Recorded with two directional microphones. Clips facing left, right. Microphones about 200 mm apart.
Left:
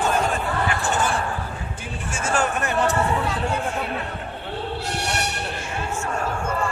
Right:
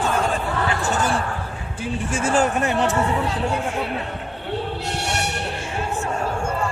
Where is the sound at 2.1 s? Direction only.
35° right (ahead or behind).